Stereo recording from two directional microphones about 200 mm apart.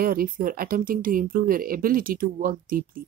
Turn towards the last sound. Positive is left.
turn(degrees=-45)  # may be behind; listen again after turning